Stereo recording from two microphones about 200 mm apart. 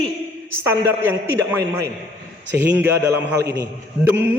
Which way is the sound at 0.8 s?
10° right (ahead or behind).